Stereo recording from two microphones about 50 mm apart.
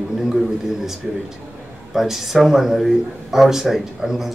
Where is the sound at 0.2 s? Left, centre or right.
Centre.